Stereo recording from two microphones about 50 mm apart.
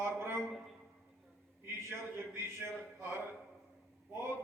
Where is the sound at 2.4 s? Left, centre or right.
Right.